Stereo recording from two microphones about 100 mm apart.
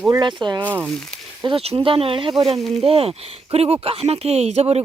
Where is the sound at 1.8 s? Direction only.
65° right (ahead or behind); by 4.8 s 90° right.